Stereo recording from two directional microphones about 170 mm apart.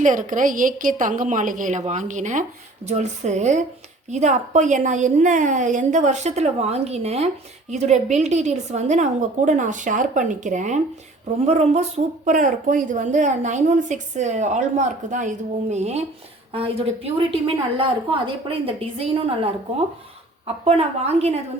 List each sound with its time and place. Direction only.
0.0 s a woman's voice: 50° right (ahead or behind)
20.7 s a woman's voice: 35° right (ahead or behind)